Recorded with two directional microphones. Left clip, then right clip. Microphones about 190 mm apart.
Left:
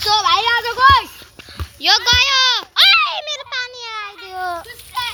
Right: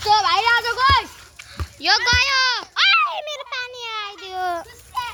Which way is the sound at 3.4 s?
15° right (ahead or behind).